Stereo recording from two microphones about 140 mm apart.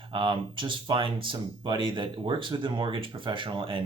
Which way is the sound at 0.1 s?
35° right (ahead or behind).